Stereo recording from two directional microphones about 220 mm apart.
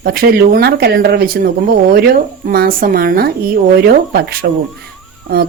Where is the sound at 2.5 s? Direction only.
40° right (ahead or behind).